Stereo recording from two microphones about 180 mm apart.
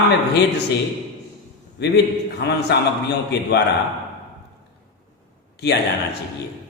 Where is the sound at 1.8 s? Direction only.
70° left (ahead or behind).